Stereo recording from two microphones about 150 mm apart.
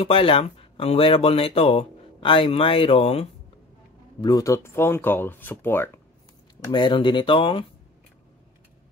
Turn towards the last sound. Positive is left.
turn(degrees=35)  # may be behind; listen again after turning